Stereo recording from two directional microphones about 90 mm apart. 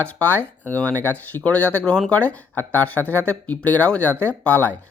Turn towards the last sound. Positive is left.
turn(degrees=20)  # may be behind; listen again after turning